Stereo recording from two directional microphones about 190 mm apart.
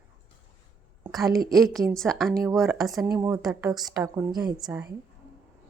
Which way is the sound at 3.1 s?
15° right (ahead or behind).